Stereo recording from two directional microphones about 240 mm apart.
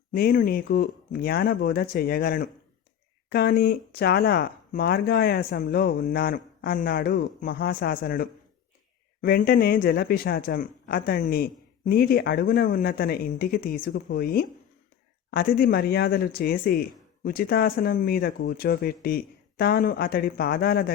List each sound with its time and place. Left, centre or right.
0.1 s speech: left